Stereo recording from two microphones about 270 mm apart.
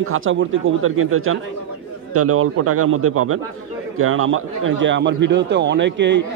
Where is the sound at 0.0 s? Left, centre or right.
Right.